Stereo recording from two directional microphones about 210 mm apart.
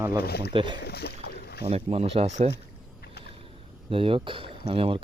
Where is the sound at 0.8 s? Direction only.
50° left (ahead or behind).